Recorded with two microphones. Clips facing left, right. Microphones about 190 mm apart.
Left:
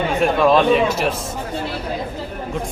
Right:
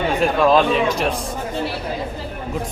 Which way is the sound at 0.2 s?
Centre (ahead or behind).